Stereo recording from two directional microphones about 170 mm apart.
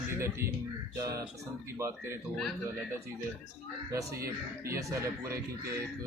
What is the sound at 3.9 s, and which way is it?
Speech, 15° right (ahead or behind).